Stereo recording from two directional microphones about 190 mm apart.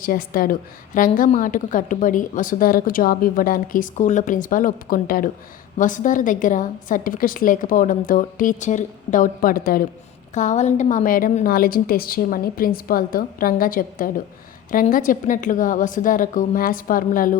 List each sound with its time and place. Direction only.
0.0 s a woman's voice: 50° left (ahead or behind)